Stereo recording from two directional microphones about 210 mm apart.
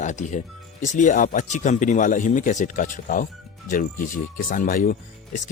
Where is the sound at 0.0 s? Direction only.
35° left (ahead or behind).